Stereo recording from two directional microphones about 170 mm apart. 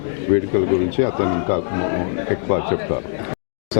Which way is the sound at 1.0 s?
15° left (ahead or behind).